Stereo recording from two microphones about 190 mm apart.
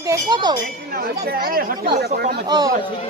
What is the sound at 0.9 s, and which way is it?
Speech, 55° right (ahead or behind).